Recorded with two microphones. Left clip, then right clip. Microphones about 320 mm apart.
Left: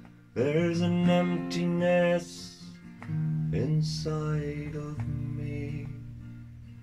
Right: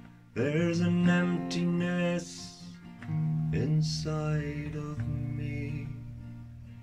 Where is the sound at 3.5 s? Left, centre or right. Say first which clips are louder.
Left 1 dB; centre.